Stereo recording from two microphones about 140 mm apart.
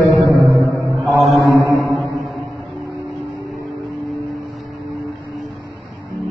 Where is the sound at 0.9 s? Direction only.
Centre (ahead or behind).